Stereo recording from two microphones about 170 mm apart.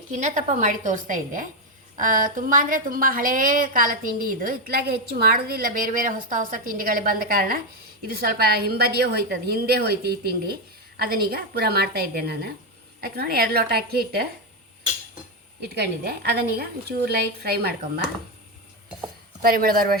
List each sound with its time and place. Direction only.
0.1 s a woman's voice: 45° right (ahead or behind); by 14.3 s 65° right (ahead or behind)
15.7 s a woman's voice: 75° right (ahead or behind)
19.4 s a woman's voice: 60° right (ahead or behind)